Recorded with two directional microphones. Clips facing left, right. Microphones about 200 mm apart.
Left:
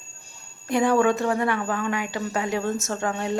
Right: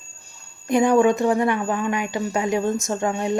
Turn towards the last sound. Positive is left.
turn(degrees=-15)  # may be behind; listen again after turning